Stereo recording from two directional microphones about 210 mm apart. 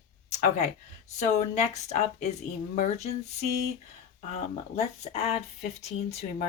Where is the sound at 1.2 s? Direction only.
35° left (ahead or behind).